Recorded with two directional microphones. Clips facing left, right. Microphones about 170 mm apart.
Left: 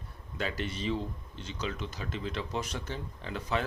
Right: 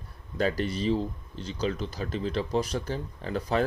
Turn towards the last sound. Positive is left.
turn(degrees=-40)  # may be behind; listen again after turning